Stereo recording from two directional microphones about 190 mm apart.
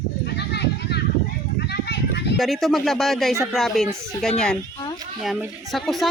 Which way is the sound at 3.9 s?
15° right (ahead or behind).